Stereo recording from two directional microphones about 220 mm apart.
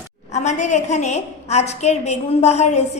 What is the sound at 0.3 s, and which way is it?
A woman's voice, 30° left (ahead or behind).